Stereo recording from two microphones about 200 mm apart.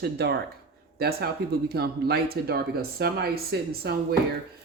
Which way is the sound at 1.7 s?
50° right (ahead or behind).